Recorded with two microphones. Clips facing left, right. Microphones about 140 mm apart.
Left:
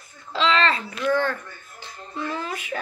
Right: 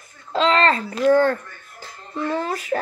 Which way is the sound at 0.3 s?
45° right (ahead or behind).